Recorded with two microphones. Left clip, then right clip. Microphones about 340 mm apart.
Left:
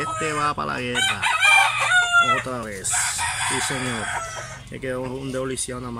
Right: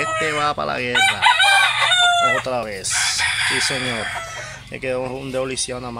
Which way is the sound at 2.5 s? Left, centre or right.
Centre.